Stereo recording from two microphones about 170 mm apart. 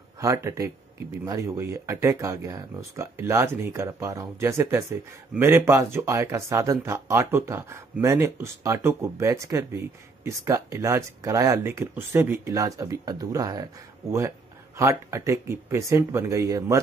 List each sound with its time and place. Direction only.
0.2 s speech: 15° right (ahead or behind)
14.8 s speech: 15° right (ahead or behind)